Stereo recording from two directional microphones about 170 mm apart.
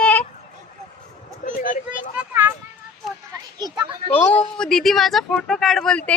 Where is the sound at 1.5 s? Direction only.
50° left (ahead or behind).